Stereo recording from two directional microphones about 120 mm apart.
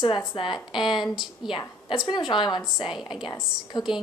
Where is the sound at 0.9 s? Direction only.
Centre (ahead or behind).